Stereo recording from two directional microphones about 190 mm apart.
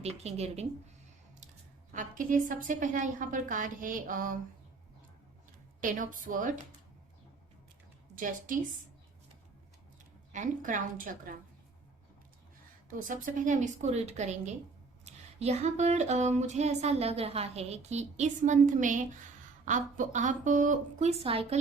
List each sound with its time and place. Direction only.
0.0 s speech: 35° right (ahead or behind)
1.9 s a woman's voice: 45° right (ahead or behind)
5.8 s a woman's voice: 45° right (ahead or behind)
8.1 s a woman's voice: 45° right (ahead or behind)
10.3 s a woman's voice: 40° right (ahead or behind)
12.9 s speech: 45° right (ahead or behind)